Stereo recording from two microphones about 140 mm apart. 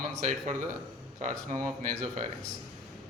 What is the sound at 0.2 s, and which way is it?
Speech, 55° right (ahead or behind).